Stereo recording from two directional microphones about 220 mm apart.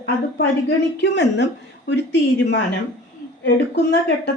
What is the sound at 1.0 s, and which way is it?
Speech, 55° left (ahead or behind).